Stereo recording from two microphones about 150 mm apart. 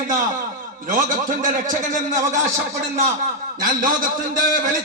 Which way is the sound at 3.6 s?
65° right (ahead or behind).